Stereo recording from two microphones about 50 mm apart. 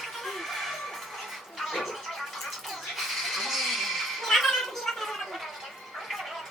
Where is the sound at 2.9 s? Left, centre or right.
Centre.